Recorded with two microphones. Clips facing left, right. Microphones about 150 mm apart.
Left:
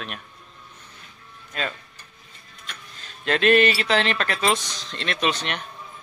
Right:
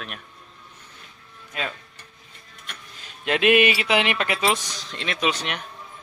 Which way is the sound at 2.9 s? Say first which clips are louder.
Even; 15° right (ahead or behind).